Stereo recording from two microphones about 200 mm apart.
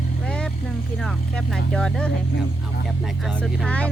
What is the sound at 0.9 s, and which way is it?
Speech, 5° left (ahead or behind).